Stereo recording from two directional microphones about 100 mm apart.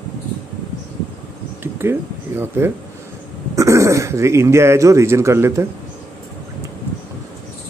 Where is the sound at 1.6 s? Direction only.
25° right (ahead or behind).